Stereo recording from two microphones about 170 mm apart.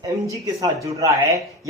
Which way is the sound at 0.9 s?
20° right (ahead or behind).